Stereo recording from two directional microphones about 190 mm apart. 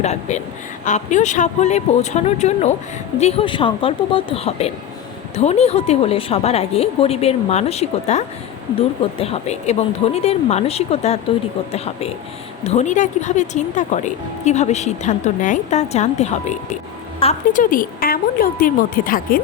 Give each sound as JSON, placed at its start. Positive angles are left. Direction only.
{"t": 0.0, "sound": "a woman's voice", "side_deg": 35}